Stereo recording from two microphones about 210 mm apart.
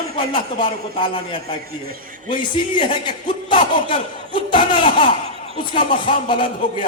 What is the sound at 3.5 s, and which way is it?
A man's voice, 25° left (ahead or behind).